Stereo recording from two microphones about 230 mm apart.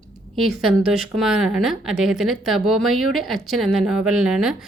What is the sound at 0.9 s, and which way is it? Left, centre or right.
Speech, centre.